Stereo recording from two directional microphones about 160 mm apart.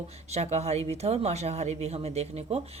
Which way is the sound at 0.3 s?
40° right (ahead or behind).